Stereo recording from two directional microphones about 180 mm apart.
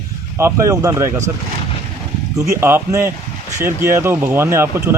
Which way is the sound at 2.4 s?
15° right (ahead or behind).